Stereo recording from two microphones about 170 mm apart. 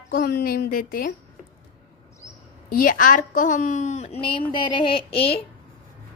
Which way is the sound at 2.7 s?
55° left (ahead or behind).